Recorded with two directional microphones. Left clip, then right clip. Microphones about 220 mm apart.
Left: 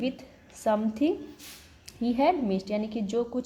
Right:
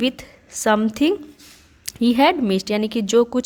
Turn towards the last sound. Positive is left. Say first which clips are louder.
# right 12 dB
turn(degrees=-45)  # may be behind; listen again after turning